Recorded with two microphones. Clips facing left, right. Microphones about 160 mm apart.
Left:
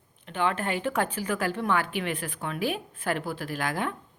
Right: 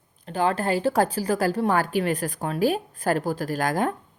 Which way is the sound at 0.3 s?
35° right (ahead or behind).